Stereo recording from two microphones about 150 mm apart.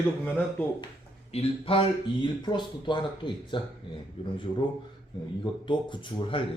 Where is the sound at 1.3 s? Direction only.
40° left (ahead or behind).